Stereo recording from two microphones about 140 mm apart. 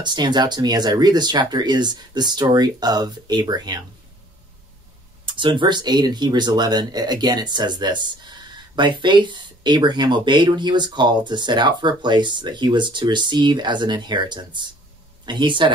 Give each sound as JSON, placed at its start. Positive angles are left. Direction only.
{"t": 0.0, "sound": "speech", "side_deg": -30}
{"t": 5.2, "sound": "speech", "side_deg": -35}